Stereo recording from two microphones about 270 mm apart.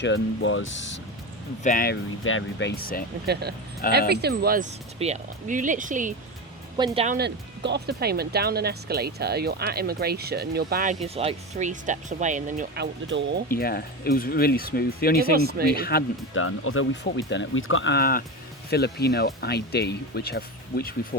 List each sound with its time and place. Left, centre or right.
0.0 s speech: left
1.6 s speech: left
2.2 s speech: left
4.1 s speech: right
6.7 s speech: centre
7.2 s speech: right
11.0 s speech: right
13.5 s speech: left
15.2 s speech: right
15.7 s speech: left
16.3 s speech: left